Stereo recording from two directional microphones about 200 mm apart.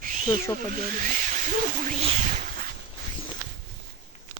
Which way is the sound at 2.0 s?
30° right (ahead or behind).